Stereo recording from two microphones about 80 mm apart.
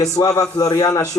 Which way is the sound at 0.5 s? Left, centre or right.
Left.